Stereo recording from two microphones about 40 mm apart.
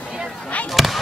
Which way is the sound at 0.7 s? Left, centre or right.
Centre.